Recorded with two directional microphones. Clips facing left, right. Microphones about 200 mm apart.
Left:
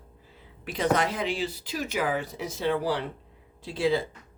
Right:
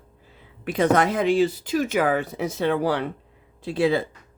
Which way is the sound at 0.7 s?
55° right (ahead or behind).